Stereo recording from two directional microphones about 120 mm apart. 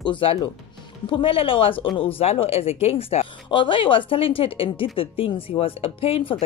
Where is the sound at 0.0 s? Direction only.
45° left (ahead or behind).